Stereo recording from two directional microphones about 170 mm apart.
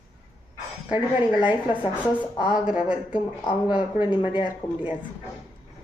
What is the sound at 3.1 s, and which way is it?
Speech, 30° left (ahead or behind).